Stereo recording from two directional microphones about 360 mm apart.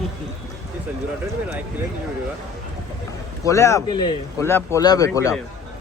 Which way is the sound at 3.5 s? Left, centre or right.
Centre.